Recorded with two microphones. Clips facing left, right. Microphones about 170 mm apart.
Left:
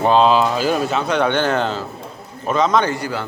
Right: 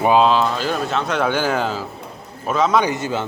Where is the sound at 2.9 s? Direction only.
20° right (ahead or behind).